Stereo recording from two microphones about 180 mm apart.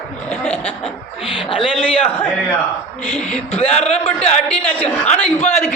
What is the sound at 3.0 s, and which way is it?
Speech, 5° left (ahead or behind).